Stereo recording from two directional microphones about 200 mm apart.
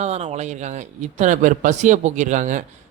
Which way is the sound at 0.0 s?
35° right (ahead or behind).